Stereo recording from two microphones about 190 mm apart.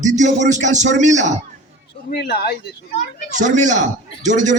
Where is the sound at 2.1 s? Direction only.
60° left (ahead or behind).